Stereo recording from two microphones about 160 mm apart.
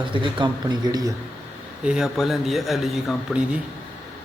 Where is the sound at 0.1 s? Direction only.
30° right (ahead or behind).